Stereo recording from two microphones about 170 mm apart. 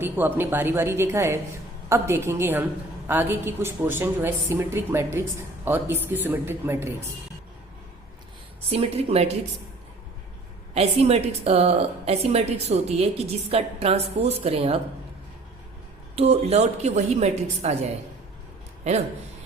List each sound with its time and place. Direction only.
0.0 s speech: 10° right (ahead or behind)
8.7 s a woman's voice: 35° right (ahead or behind)
10.8 s a woman's voice: 35° right (ahead or behind)
16.1 s a woman's voice: 40° right (ahead or behind)